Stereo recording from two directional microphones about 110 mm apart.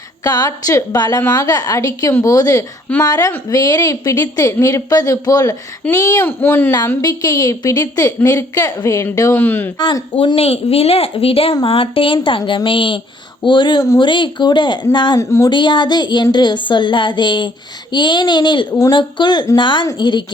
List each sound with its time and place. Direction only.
0.3 s a woman's voice: 35° left (ahead or behind)
5.9 s speech: 25° left (ahead or behind)
7.0 s a woman's voice: 35° left (ahead or behind)
9.7 s speech: 45° left (ahead or behind)
10.3 s speech: 65° left (ahead or behind); by 15.2 s 45° left (ahead or behind)
15.2 s speech: 25° left (ahead or behind)
15.4 s speech: 45° left (ahead or behind)
18.7 s speech: 25° left (ahead or behind)
18.9 s a woman's voice: 45° left (ahead or behind)